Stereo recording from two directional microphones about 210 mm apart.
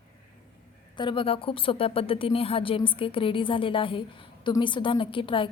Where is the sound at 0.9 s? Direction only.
25° left (ahead or behind).